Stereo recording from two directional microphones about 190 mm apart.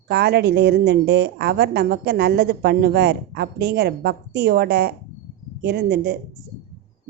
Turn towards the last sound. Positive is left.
turn(degrees=-60)  # may be behind; listen again after turning